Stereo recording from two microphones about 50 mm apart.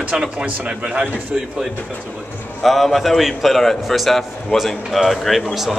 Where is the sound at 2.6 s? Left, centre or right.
Centre.